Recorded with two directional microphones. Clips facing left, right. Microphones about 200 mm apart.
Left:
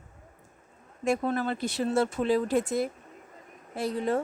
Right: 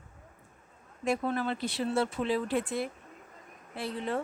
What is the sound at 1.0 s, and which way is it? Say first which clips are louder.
Speech: left 3 dB; 45° left (ahead or behind).